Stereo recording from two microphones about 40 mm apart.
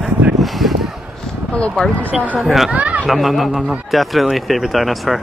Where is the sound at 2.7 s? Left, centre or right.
Right.